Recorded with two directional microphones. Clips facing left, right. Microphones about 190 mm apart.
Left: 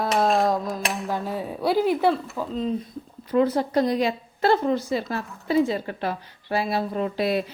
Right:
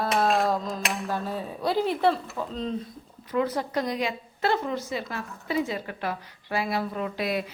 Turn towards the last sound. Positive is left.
turn(degrees=30)  # may be behind; listen again after turning